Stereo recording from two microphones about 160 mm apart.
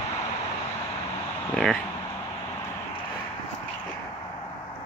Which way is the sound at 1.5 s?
5° left (ahead or behind).